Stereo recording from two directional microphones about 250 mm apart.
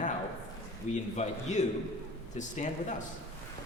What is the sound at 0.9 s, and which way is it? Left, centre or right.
Speech, left.